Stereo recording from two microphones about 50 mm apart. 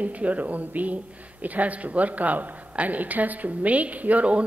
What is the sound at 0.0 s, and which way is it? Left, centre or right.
A woman's voice, right.